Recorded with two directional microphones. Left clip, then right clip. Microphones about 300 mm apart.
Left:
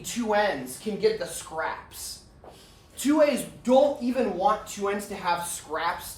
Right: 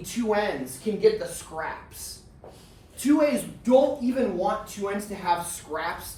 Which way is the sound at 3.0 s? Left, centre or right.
Centre.